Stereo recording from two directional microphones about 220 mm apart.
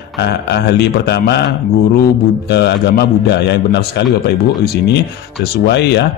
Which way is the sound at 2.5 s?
50° left (ahead or behind).